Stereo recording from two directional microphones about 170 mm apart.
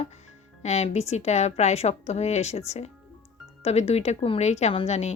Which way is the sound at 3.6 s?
40° left (ahead or behind).